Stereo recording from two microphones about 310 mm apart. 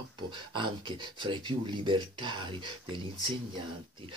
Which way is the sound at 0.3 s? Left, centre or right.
Centre.